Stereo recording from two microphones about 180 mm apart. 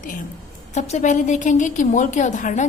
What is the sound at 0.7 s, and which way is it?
A woman's voice, 40° left (ahead or behind).